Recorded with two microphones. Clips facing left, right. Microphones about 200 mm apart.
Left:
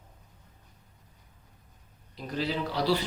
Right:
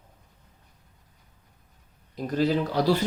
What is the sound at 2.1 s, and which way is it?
Speech, 45° right (ahead or behind).